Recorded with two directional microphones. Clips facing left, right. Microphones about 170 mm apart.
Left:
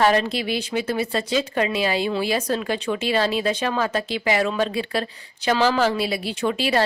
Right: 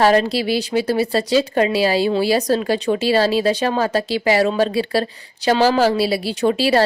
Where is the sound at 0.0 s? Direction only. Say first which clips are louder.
Right 4 dB; 35° right (ahead or behind).